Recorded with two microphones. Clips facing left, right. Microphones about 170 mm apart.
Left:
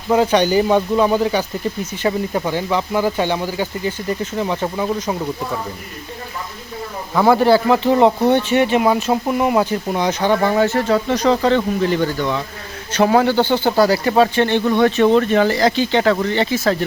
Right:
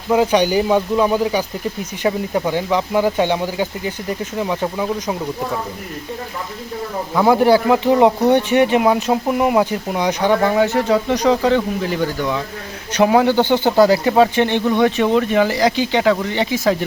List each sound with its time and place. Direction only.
0.1 s speech: 10° right (ahead or behind)
7.1 s speech: 10° right (ahead or behind)